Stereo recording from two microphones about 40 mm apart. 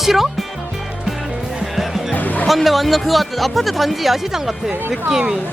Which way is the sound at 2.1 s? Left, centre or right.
Left.